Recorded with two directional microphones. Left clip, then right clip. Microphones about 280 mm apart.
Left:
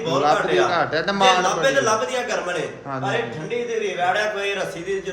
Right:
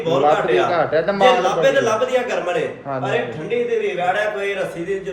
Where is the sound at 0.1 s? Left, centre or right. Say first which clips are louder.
Right 3 dB; centre.